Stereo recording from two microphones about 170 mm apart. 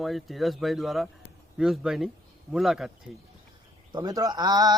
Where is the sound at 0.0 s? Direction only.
Centre (ahead or behind).